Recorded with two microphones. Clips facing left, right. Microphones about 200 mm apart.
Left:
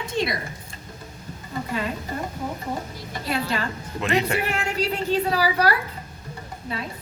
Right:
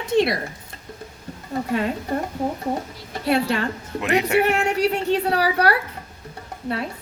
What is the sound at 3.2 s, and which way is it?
A woman's voice, 65° right (ahead or behind).